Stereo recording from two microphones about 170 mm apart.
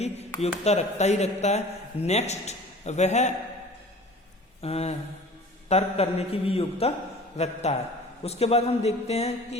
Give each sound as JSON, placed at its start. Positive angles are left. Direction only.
{"t": 0.6, "sound": "a man's voice", "side_deg": 40}
{"t": 4.6, "sound": "a man's voice", "side_deg": 40}